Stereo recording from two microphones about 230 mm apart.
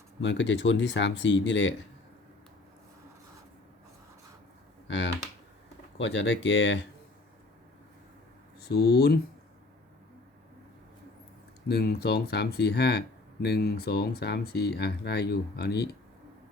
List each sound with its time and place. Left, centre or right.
0.2 s speech: left
4.9 s speech: left
8.6 s speech: left
11.7 s speech: left